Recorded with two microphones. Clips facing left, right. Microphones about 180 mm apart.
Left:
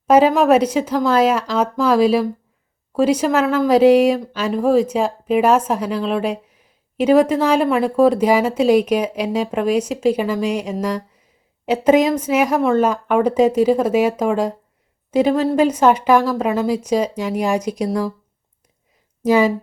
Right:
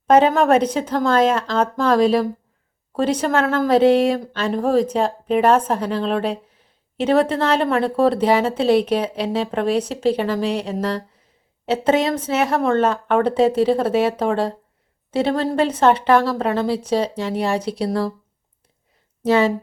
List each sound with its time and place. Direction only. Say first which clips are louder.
0.1 s speech: left 2 dB; 5° left (ahead or behind)
16.6 s speech: left 2 dB; 30° right (ahead or behind)
19.3 s speech: left 2 dB; 10° left (ahead or behind)